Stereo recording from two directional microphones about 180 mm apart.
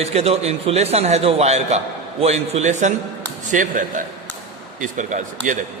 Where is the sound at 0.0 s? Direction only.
35° right (ahead or behind).